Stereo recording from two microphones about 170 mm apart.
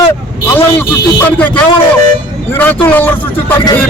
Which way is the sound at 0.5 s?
10° left (ahead or behind).